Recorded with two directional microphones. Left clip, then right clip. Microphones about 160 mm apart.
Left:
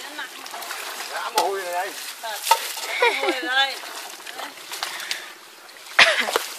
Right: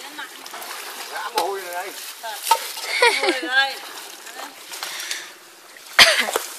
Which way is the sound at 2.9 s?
10° right (ahead or behind).